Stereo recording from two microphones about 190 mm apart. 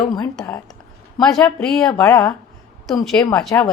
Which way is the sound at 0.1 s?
5° left (ahead or behind).